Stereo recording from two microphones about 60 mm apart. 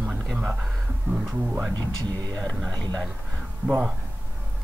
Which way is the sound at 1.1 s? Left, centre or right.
Right.